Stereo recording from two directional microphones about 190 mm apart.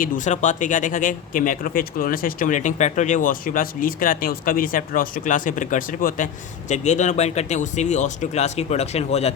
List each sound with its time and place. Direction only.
0.0 s speech: 40° left (ahead or behind)